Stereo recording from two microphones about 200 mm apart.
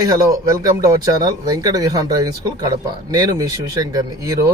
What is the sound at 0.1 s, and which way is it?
Speech, 20° right (ahead or behind).